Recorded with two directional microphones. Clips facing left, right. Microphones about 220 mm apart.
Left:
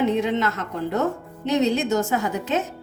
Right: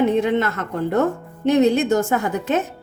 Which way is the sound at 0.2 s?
55° right (ahead or behind).